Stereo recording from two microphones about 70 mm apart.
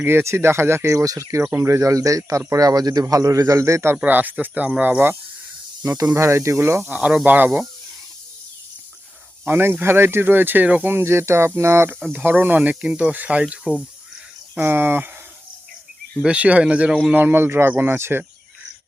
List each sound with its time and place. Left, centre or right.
0.0 s a man's voice: right
3.9 s speech: right
6.1 s speech: right
6.8 s speech: right
9.4 s speech: right
10.9 s speech: right
12.1 s speech: right
14.6 s speech: right
16.2 s speech: centre
17.2 s speech: right